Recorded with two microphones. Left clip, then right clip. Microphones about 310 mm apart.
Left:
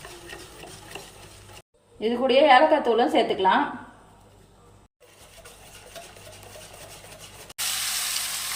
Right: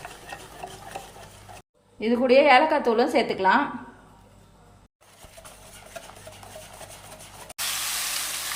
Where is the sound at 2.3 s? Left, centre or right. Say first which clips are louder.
Left 1 dB; centre.